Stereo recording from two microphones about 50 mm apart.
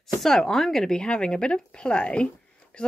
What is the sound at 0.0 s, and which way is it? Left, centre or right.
Speech, centre.